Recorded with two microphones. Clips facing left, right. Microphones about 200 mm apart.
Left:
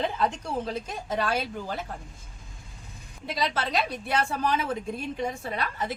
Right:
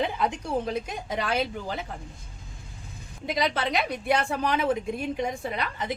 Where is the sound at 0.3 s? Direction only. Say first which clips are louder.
Right 3 dB; 15° right (ahead or behind).